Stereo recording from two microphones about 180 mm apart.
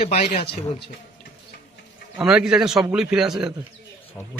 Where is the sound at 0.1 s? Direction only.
35° left (ahead or behind).